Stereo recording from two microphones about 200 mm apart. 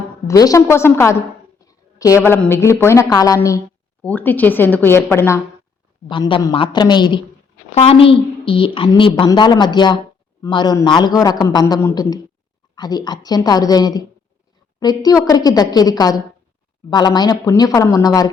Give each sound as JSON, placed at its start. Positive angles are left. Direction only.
{"t": 0.3, "sound": "a woman's voice", "side_deg": 15}
{"t": 6.1, "sound": "a woman's voice", "side_deg": 25}